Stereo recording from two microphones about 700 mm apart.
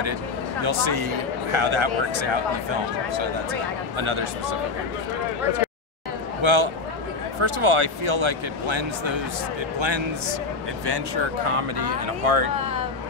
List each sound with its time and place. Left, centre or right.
0.6 s speech: right
6.4 s speech: right
11.4 s speech: right